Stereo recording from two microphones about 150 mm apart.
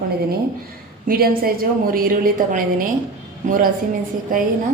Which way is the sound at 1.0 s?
70° right (ahead or behind).